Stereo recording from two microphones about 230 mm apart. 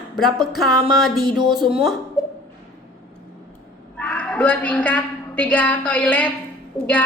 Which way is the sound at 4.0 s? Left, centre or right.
Centre.